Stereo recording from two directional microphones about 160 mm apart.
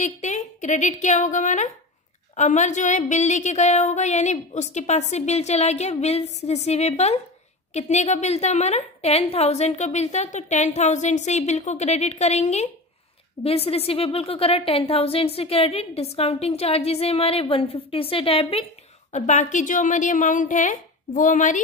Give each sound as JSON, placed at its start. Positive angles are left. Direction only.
{"t": 0.0, "sound": "a woman's voice", "side_deg": 50}
{"t": 19.1, "sound": "a woman's voice", "side_deg": 50}